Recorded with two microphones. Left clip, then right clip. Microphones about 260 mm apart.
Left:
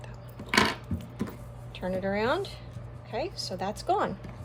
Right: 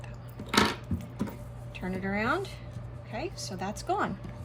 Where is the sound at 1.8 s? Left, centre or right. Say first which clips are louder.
Left 4 dB; centre.